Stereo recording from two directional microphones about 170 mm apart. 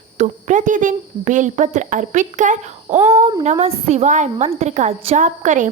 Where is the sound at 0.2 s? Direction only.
45° right (ahead or behind).